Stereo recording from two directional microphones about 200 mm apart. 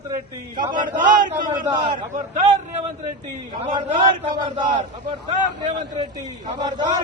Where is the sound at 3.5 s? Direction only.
25° right (ahead or behind).